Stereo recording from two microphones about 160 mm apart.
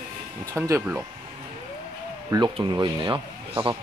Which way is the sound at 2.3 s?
25° right (ahead or behind).